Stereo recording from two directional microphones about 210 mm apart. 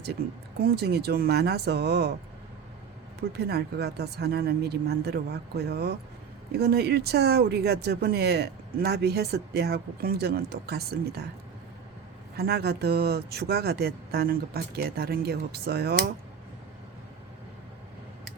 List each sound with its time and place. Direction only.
0.6 s speech: 50° right (ahead or behind)
3.2 s speech: 50° right (ahead or behind)
12.4 s speech: 50° right (ahead or behind)